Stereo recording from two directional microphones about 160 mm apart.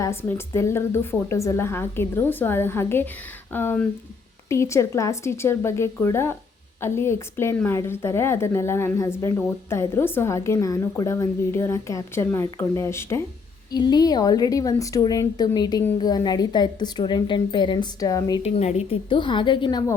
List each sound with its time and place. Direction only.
0.0 s a woman's voice: 15° left (ahead or behind)
18.4 s a woman's voice: 40° left (ahead or behind)